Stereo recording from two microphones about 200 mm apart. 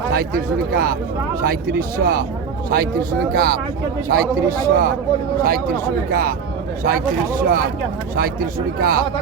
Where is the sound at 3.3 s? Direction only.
50° right (ahead or behind).